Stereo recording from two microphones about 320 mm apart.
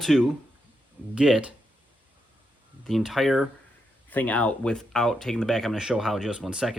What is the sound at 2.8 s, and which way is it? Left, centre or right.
Speech, centre.